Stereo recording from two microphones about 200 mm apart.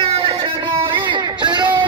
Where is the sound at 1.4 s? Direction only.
20° right (ahead or behind).